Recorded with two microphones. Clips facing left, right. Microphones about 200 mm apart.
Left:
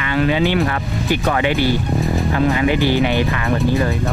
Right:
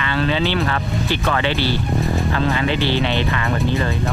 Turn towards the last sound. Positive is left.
turn(degrees=15)  # may be behind; listen again after turning